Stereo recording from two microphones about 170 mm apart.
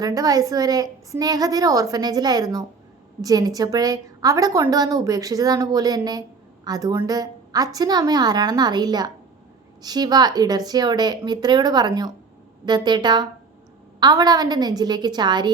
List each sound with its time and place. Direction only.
0.0 s a woman's voice: 20° right (ahead or behind)